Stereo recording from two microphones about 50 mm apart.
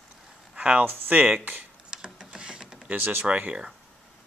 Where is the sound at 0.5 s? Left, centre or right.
Right.